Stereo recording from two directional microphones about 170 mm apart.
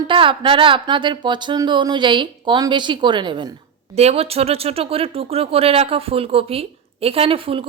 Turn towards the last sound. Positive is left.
turn(degrees=-35)  # may be behind; listen again after turning